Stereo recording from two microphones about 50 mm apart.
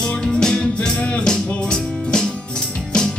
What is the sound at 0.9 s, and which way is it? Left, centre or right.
Music, left.